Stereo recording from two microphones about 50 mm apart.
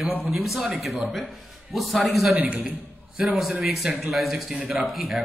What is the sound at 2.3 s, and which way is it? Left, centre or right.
Speech, right.